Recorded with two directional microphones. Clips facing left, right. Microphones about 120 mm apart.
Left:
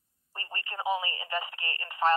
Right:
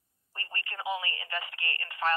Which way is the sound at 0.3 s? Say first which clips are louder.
Left 1 dB; 25° left (ahead or behind).